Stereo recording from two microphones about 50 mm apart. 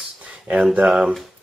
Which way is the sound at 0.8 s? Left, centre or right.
Centre.